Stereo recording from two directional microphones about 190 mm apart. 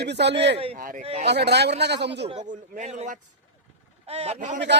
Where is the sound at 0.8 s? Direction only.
45° right (ahead or behind).